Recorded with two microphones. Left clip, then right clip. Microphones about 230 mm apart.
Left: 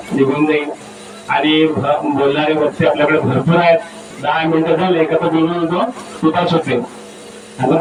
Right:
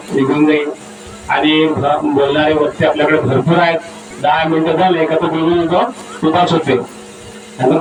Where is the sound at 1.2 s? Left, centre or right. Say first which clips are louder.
Right 1 dB; right.